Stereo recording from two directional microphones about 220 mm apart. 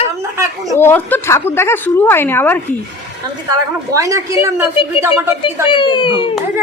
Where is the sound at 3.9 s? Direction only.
15° right (ahead or behind).